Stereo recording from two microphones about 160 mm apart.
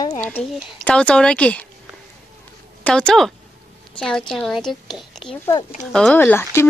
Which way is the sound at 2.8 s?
5° left (ahead or behind).